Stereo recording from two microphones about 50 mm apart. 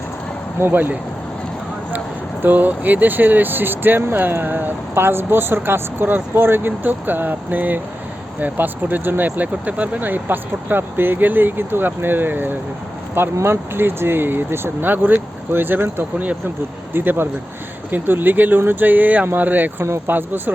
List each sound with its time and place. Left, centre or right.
0.6 s speech: right
2.4 s speech: right
13.3 s speech: right